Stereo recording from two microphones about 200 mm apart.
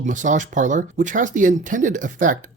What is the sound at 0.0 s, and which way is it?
Speech, 40° right (ahead or behind).